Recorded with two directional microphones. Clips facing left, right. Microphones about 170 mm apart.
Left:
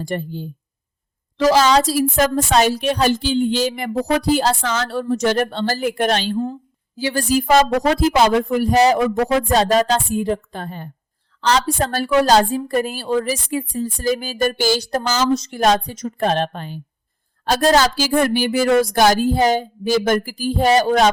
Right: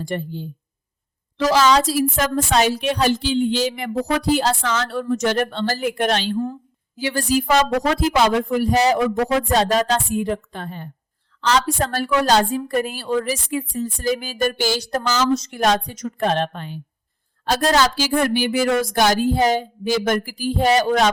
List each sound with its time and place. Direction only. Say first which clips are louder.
0.0 s a woman's voice: left 1 dB; 40° left (ahead or behind)
6.3 s a woman's voice: left 1 dB; 20° left (ahead or behind)
6.9 s a woman's voice: left 2 dB; 35° left (ahead or behind)